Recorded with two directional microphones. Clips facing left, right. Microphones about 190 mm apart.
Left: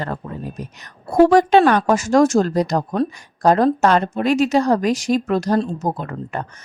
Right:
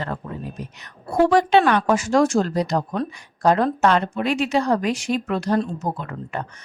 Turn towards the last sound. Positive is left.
turn(degrees=40)  # may be behind; listen again after turning